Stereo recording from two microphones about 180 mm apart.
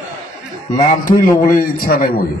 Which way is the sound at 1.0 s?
55° left (ahead or behind).